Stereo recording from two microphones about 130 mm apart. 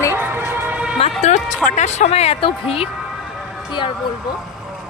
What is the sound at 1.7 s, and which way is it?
Speech, 60° left (ahead or behind).